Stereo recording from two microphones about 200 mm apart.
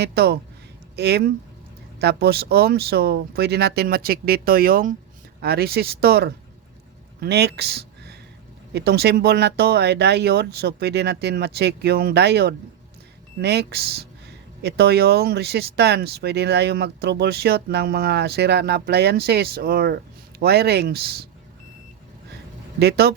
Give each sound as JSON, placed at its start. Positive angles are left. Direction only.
{"t": 0.0, "sound": "speech", "side_deg": -55}
{"t": 22.8, "sound": "speech", "side_deg": -55}